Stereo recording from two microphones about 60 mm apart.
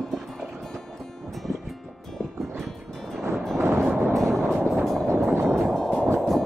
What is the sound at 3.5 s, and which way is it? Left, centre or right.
Music, right.